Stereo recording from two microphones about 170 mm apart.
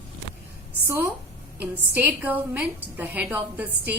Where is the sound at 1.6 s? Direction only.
10° right (ahead or behind).